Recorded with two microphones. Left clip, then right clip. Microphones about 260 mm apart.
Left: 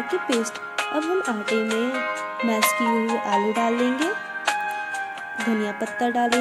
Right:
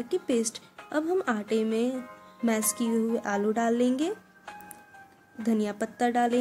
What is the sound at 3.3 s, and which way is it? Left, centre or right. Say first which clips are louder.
Speech: left 6 dB; centre.